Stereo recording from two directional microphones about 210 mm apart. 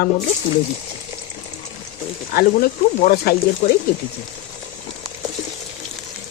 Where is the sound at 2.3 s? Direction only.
45° left (ahead or behind).